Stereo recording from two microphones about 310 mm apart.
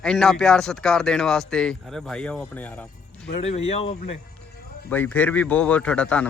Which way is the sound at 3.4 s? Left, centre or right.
Centre.